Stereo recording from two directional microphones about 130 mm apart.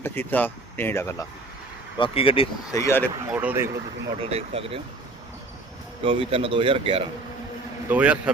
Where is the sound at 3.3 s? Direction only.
10° right (ahead or behind).